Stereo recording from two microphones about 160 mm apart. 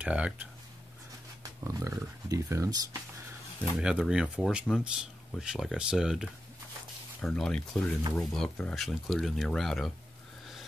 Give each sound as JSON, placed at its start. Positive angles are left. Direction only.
{"t": 0.0, "sound": "speech", "side_deg": -10}
{"t": 1.4, "sound": "speech", "side_deg": -20}
{"t": 3.7, "sound": "speech", "side_deg": -5}